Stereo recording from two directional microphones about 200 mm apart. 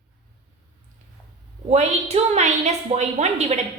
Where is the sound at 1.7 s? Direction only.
30° right (ahead or behind).